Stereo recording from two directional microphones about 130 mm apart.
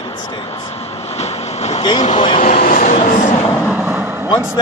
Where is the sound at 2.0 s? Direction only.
50° left (ahead or behind).